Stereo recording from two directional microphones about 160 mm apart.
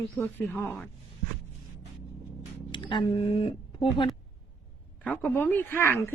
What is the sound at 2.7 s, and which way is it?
Speech, 30° left (ahead or behind).